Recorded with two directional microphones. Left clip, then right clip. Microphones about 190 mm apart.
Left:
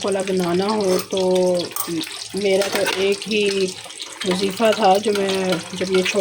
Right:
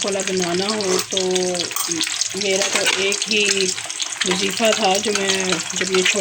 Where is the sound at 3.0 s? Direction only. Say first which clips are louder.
Right 1 dB; 15° left (ahead or behind).